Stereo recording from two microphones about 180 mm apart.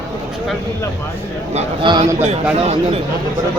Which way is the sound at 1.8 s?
25° right (ahead or behind).